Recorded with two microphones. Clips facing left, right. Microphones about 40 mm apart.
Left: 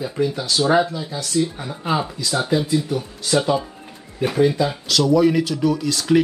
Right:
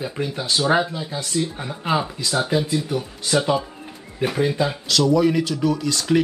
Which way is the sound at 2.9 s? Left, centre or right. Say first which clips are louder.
Left 1 dB; centre.